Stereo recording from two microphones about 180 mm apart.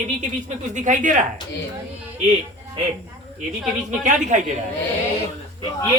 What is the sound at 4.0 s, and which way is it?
Speech, 45° right (ahead or behind).